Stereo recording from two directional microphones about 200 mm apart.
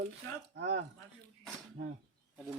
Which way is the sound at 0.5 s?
55° right (ahead or behind).